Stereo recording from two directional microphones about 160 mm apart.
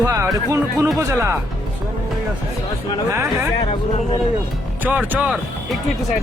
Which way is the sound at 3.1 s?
20° right (ahead or behind).